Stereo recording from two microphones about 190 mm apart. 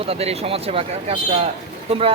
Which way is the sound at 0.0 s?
30° right (ahead or behind).